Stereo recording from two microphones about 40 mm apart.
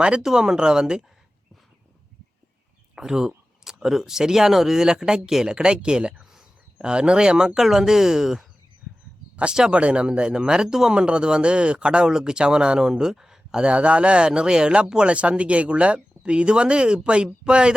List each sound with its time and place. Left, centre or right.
0.2 s speech: centre
2.9 s speech: centre
9.3 s a sound: right
9.7 s speech: right
13.7 s speech: right